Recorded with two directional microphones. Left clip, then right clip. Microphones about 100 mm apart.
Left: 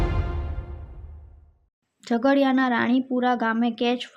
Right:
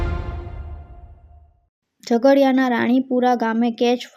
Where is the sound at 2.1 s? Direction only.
25° right (ahead or behind).